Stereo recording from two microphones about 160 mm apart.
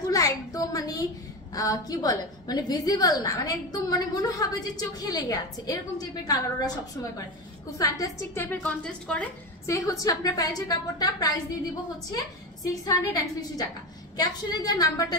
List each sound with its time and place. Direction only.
0.1 s a sound: 20° left (ahead or behind)
1.5 s a woman's voice: 20° left (ahead or behind); by 9.3 s 5° left (ahead or behind)
9.7 s a woman's voice: 20° left (ahead or behind)